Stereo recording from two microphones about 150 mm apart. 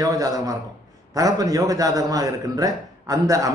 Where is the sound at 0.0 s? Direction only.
25° right (ahead or behind).